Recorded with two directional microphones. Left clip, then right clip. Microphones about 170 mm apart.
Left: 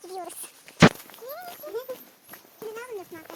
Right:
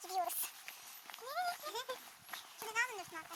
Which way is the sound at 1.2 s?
15° right (ahead or behind).